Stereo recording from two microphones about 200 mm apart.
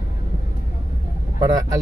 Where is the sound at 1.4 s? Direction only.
15° right (ahead or behind).